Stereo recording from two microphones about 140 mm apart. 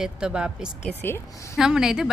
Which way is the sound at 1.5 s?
5° right (ahead or behind).